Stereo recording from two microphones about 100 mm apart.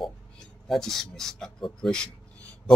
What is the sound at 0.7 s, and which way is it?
Speech, 5° left (ahead or behind).